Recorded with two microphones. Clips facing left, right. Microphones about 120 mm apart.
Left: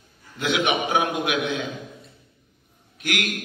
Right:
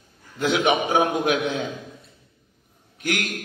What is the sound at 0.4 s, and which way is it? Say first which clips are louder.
A man's voice: right 3 dB; 35° right (ahead or behind).